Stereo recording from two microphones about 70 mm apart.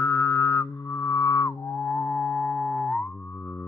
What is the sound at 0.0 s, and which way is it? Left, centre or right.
Music, left.